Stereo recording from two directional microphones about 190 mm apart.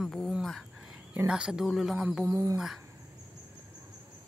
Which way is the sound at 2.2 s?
15° right (ahead or behind).